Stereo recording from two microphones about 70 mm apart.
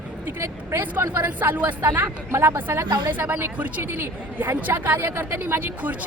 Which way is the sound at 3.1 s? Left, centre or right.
Right.